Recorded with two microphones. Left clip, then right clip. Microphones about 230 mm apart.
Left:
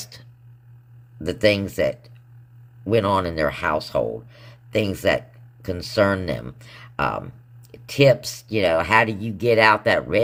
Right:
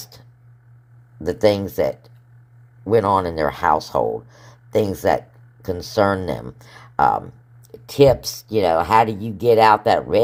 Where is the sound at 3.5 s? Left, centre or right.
Centre.